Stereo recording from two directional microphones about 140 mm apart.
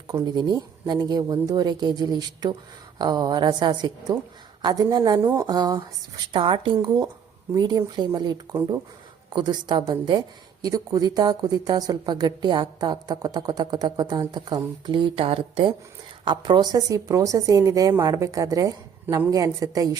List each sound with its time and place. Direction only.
0.1 s speech: 30° right (ahead or behind)
5.2 s speech: 15° right (ahead or behind)
5.5 s speech: 30° right (ahead or behind)